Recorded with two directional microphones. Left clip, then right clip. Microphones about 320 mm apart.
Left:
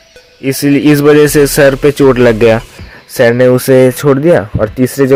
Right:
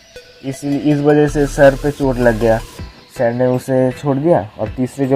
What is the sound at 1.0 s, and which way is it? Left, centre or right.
Speech, left.